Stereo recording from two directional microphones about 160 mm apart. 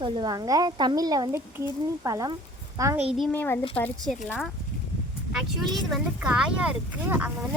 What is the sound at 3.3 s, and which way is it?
Speech, 10° left (ahead or behind).